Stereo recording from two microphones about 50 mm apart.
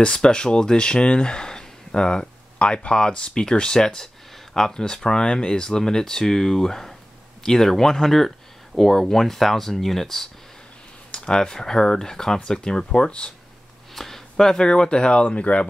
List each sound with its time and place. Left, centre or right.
0.0 s speech: centre
13.9 s speech: centre; by 15.6 s left